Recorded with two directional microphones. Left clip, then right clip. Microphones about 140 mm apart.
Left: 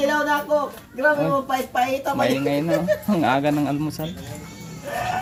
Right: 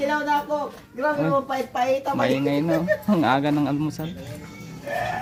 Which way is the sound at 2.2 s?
20° right (ahead or behind).